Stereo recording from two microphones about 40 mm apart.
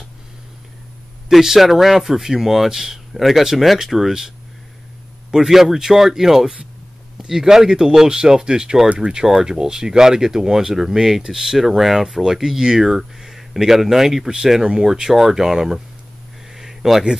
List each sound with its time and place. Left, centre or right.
1.3 s speech: centre
5.3 s speech: centre
8.8 s speech: right
9.1 s speech: centre
16.5 s a sound: centre